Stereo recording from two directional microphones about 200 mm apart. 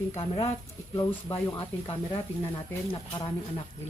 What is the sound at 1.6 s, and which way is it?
A woman's voice, 25° left (ahead or behind).